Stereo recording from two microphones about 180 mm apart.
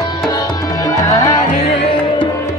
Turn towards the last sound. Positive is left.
turn(degrees=20)  # may be behind; listen again after turning